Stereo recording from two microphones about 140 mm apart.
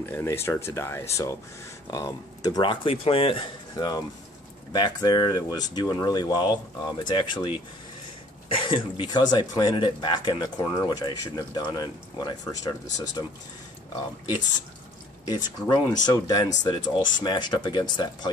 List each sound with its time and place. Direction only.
0.1 s speech: 20° left (ahead or behind); by 3.4 s 40° left (ahead or behind)
3.7 s speech: 30° left (ahead or behind)
15.2 s speech: 30° left (ahead or behind)